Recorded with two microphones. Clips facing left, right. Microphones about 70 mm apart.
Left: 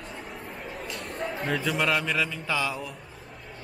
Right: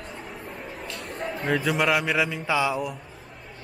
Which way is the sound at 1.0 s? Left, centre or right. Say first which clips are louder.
Right 1 dB; centre.